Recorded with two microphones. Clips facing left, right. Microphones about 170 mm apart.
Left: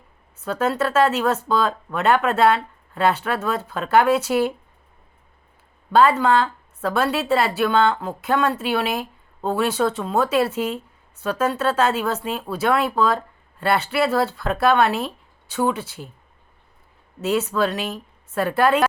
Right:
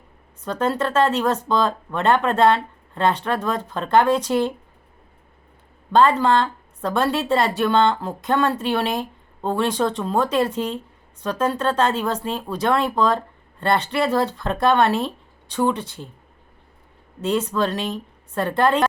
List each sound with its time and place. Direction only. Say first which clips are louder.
0.4 s a woman's voice: even; 5° left (ahead or behind)
5.9 s a woman's voice: even; 5° left (ahead or behind)
17.2 s a woman's voice: even; 5° left (ahead or behind)